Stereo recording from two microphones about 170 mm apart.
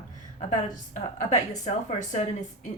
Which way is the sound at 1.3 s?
45° left (ahead or behind).